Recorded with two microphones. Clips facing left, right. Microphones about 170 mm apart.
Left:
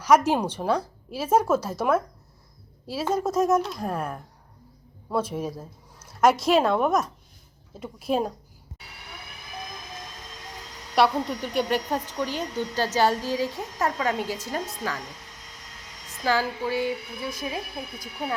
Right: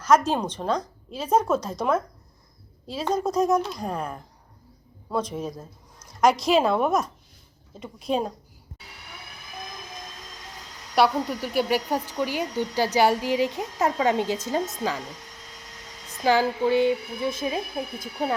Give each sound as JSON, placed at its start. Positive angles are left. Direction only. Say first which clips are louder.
{"t": 0.0, "sound": "a woman's voice", "louder": "left 1 dB", "side_deg": 10}
{"t": 10.9, "sound": "a woman's voice", "louder": "right 1 dB", "side_deg": 0}
{"t": 16.2, "sound": "speech", "louder": "right 4 dB", "side_deg": -20}